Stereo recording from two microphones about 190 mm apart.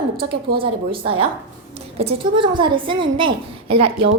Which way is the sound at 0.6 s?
30° right (ahead or behind).